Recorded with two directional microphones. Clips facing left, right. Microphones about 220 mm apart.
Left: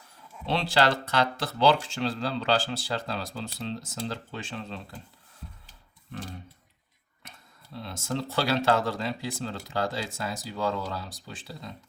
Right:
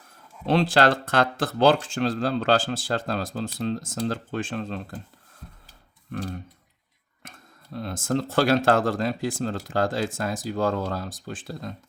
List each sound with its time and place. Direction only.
0.4 s speech: 50° right (ahead or behind)
6.1 s speech: 55° right (ahead or behind)